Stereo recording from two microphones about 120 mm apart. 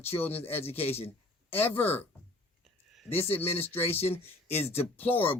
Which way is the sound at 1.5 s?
15° left (ahead or behind).